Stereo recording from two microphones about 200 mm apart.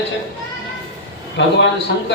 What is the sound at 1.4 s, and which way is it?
Speech, 60° left (ahead or behind).